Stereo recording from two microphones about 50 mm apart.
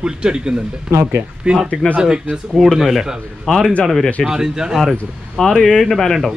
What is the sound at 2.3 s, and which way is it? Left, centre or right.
A man's voice, centre.